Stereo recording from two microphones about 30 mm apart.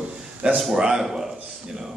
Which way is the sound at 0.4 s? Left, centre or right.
Right.